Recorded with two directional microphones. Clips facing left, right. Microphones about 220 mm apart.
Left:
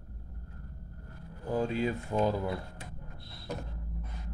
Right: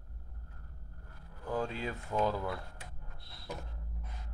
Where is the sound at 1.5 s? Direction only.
15° left (ahead or behind).